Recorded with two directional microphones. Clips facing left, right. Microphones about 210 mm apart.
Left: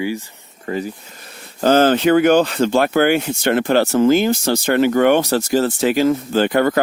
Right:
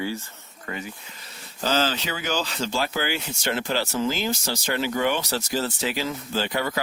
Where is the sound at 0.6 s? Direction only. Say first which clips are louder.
Left 11 dB; 35° left (ahead or behind).